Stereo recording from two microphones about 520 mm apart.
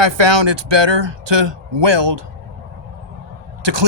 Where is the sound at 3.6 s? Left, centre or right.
Right.